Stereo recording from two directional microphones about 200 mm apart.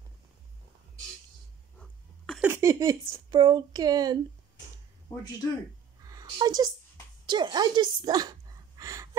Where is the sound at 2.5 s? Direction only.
15° right (ahead or behind).